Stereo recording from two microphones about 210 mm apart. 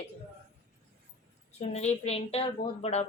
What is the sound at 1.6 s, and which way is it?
Speech, 30° left (ahead or behind).